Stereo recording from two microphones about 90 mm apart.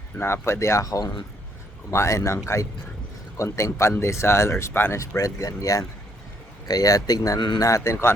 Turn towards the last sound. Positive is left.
turn(degrees=35)  # may be behind; listen again after turning